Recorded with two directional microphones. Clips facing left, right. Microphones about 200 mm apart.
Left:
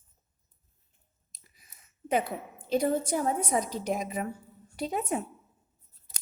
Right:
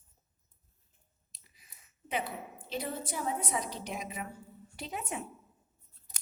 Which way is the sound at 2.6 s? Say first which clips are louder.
Left 11 dB; 45° left (ahead or behind).